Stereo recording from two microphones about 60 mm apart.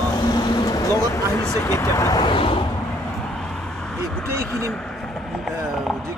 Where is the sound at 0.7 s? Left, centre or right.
Left.